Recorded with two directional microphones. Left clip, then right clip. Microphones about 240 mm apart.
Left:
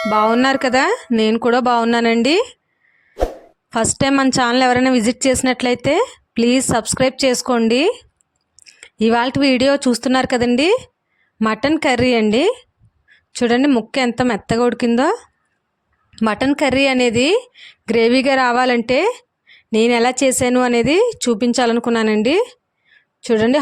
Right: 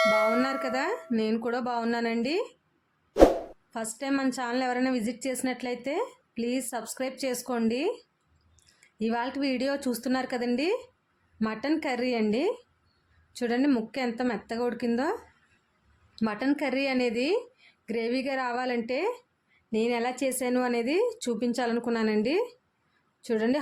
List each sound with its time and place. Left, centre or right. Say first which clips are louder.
0.0 s speech: left 7 dB; centre
0.3 s speech: left 12 dB; left
3.7 s speech: left 16 dB; left